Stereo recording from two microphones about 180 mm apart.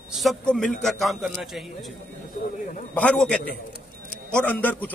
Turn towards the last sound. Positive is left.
turn(degrees=10)  # may be behind; listen again after turning